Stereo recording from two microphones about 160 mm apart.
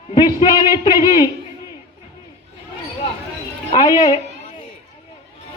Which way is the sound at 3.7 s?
25° left (ahead or behind).